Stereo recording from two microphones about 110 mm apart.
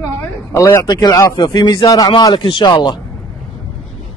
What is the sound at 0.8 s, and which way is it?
A man's voice, 35° left (ahead or behind).